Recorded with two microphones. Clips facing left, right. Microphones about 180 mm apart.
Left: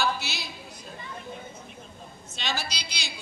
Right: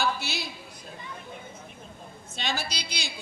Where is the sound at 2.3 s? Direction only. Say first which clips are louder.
Right 1 dB; 55° right (ahead or behind).